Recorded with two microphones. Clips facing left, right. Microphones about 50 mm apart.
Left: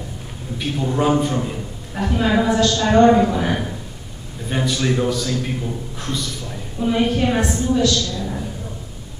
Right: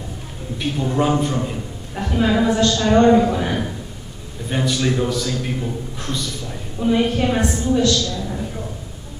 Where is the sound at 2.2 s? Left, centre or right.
Centre.